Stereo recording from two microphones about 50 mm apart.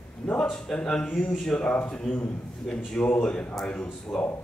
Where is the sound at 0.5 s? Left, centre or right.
Centre.